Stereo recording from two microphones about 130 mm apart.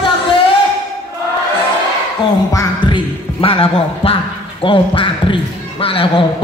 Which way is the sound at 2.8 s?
40° left (ahead or behind).